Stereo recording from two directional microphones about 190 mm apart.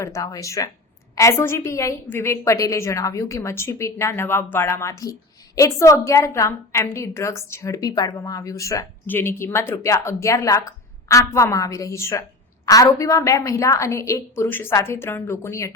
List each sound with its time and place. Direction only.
0.0 s a woman's voice: 20° left (ahead or behind)